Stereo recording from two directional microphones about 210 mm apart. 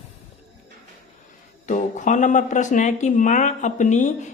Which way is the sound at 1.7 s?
35° left (ahead or behind).